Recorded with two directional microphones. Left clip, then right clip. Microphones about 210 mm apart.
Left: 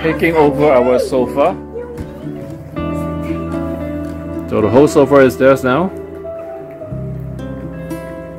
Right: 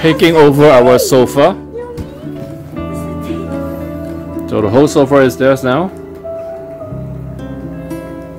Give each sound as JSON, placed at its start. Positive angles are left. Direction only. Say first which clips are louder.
{"t": 0.0, "sound": "speech", "louder": "right 5 dB", "side_deg": -55}
{"t": 3.5, "sound": "music", "louder": "even", "side_deg": 0}